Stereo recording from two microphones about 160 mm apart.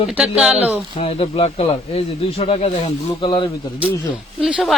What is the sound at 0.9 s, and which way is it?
Speech, 35° left (ahead or behind).